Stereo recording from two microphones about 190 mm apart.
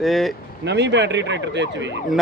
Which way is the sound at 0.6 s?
65° right (ahead or behind).